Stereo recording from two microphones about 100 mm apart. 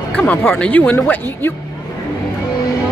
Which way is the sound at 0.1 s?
15° left (ahead or behind).